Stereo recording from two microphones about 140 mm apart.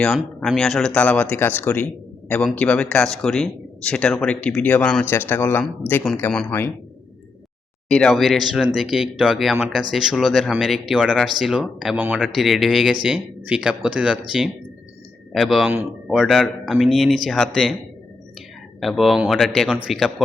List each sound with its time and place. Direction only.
0.3 s speech: 5° left (ahead or behind)
7.9 s a man's voice: 5° left (ahead or behind)
18.8 s speech: centre (ahead or behind)